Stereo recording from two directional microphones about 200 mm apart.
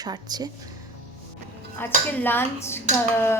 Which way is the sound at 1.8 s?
10° left (ahead or behind).